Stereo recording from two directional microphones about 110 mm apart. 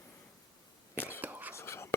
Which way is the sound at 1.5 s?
25° left (ahead or behind).